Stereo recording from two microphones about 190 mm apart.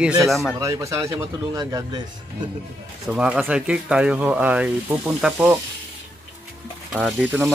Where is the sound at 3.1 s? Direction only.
5° right (ahead or behind).